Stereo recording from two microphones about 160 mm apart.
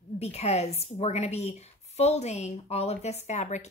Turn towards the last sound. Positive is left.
turn(degrees=45)  # may be behind; listen again after turning